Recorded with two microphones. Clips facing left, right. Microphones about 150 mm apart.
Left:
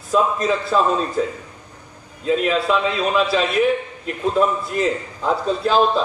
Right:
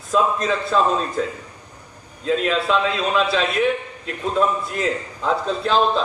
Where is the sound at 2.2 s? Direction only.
5° left (ahead or behind).